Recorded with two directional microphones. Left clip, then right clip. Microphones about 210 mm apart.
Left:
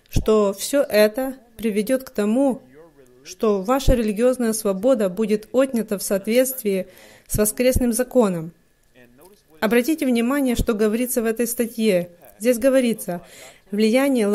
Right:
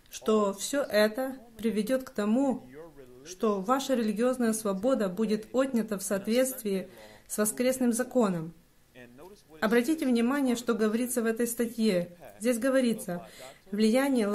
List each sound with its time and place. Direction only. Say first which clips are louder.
0.1 s speech: left 9 dB; 30° left (ahead or behind)
9.6 s speech: left 7 dB; 35° left (ahead or behind)